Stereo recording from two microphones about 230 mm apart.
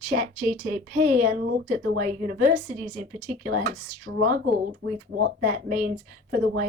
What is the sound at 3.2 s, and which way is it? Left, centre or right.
Speech, right.